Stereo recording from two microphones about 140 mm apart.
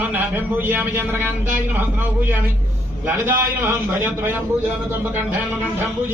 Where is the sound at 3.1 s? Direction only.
15° right (ahead or behind).